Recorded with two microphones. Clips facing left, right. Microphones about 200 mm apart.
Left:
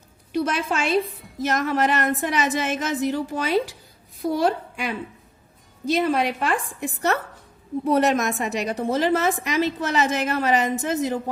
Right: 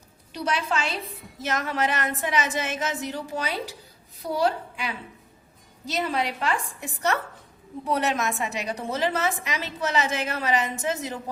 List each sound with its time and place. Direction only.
0.3 s a woman's voice: 50° left (ahead or behind)